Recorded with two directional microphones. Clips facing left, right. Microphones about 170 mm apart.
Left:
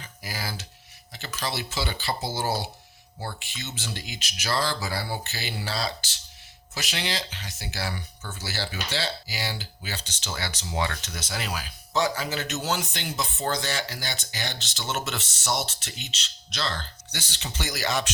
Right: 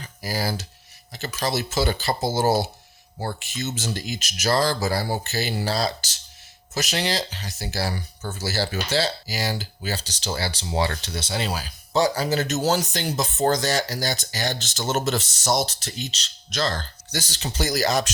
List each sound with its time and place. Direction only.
0.0 s speech: 40° right (ahead or behind)